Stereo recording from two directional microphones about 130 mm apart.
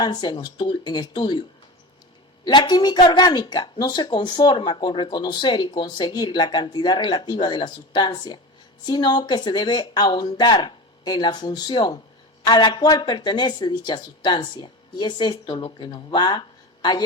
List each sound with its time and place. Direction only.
0.0 s speech: 35° left (ahead or behind)